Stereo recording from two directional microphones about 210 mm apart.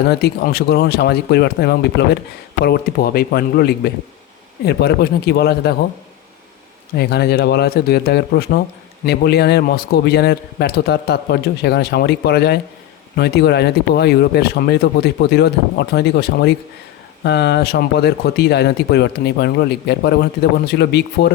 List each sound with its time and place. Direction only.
0.1 s speech: 50° left (ahead or behind)
6.9 s speech: 50° left (ahead or behind)